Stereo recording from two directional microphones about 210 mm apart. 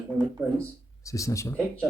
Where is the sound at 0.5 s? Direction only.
15° left (ahead or behind).